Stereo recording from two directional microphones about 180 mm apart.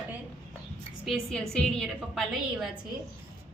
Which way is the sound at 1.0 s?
Centre (ahead or behind).